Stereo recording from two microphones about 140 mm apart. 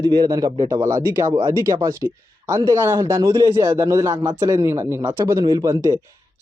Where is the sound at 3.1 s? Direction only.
35° right (ahead or behind).